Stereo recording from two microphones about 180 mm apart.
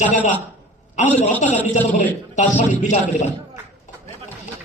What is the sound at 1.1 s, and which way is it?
Speech, 40° left (ahead or behind).